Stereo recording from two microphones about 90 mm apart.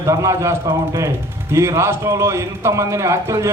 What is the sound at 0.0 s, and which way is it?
A man's voice, 35° right (ahead or behind).